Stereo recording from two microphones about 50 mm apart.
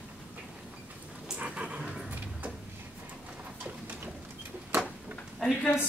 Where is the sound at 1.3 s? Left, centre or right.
Right.